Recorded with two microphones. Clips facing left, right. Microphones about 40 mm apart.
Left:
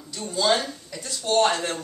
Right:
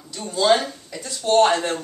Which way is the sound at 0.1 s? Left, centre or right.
Centre.